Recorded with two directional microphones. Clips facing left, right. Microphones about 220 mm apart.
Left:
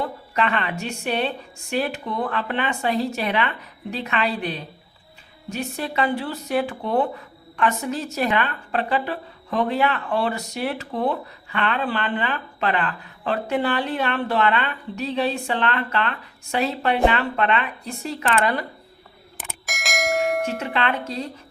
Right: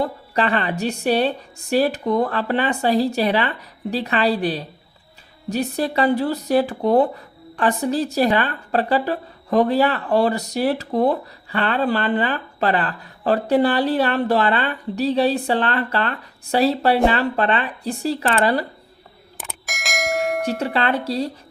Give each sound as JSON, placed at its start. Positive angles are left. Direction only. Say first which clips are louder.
{"t": 0.0, "sound": "a woman's voice", "louder": "right 3 dB", "side_deg": -35}
{"t": 19.4, "sound": "bell", "louder": "even", "side_deg": 0}
{"t": 20.7, "sound": "a woman's voice", "louder": "right 4 dB", "side_deg": -35}